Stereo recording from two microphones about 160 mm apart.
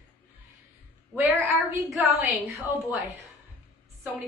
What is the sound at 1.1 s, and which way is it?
Speech, 15° right (ahead or behind).